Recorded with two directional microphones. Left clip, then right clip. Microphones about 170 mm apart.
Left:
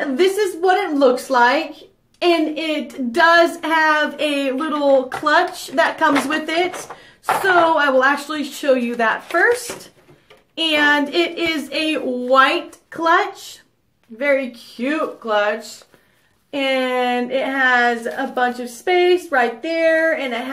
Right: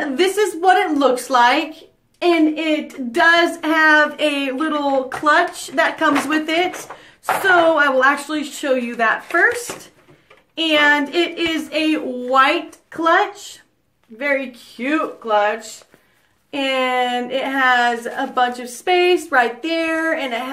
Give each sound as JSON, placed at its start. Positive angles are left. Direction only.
{"t": 0.1, "sound": "a woman's voice", "side_deg": -20}
{"t": 2.5, "sound": "speech", "side_deg": -10}
{"t": 10.5, "sound": "speech", "side_deg": -5}
{"t": 16.5, "sound": "a woman's voice", "side_deg": -20}